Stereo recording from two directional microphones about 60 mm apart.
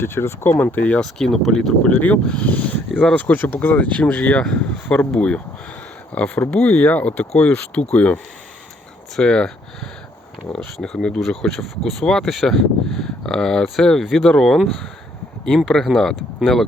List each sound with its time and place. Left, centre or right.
0.0 s speech: left
0.6 s speech: left
1.0 s speech: centre
1.9 s speech: left
5.1 s speech: centre
6.1 s speech: left
14.0 s speech: centre
14.3 s speech: centre